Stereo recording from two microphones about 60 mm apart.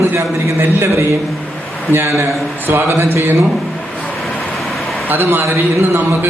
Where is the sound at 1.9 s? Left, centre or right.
Right.